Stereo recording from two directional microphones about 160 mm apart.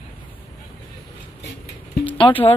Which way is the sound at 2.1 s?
35° left (ahead or behind).